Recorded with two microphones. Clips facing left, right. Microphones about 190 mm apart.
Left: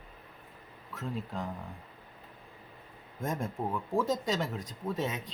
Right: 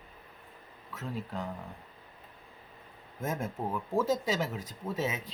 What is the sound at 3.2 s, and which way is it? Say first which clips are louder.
Speech: even; 5° right (ahead or behind).